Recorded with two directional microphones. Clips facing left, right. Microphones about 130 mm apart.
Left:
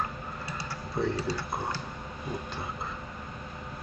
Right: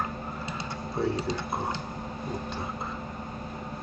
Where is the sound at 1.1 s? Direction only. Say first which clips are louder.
Right 2 dB; 20° right (ahead or behind).